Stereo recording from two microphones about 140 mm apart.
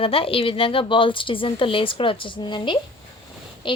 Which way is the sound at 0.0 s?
40° left (ahead or behind).